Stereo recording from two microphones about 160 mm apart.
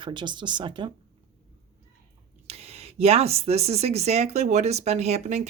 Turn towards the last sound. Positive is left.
turn(degrees=-45)  # may be behind; listen again after turning